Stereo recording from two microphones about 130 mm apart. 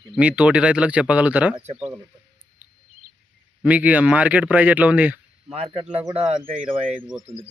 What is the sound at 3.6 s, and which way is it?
Speech, 10° right (ahead or behind).